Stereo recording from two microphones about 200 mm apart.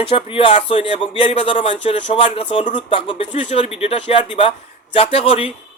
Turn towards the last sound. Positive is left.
turn(degrees=30)  # may be behind; listen again after turning